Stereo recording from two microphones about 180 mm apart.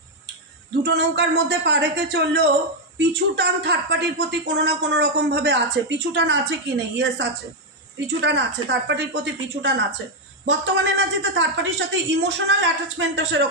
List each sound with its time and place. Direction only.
0.8 s a woman's voice: 70° right (ahead or behind); by 13.4 s 85° right